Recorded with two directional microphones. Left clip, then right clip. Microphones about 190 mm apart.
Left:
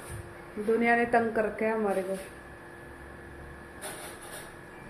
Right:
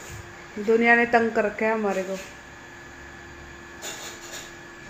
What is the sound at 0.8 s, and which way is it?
Speech, 35° right (ahead or behind).